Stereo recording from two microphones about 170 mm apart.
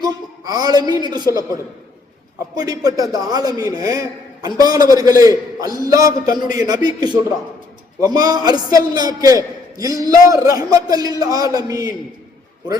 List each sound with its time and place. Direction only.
0.0 s a sound: 25° right (ahead or behind)
1.1 s a man's voice: 25° right (ahead or behind)
2.6 s a man's voice: 20° right (ahead or behind)